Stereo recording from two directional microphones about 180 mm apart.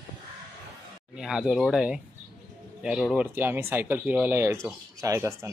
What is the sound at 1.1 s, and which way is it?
Speech, 5° right (ahead or behind).